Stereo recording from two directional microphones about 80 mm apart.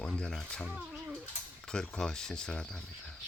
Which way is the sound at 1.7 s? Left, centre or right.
Centre.